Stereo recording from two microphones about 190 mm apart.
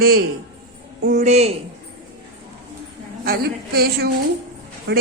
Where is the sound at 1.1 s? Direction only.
35° right (ahead or behind).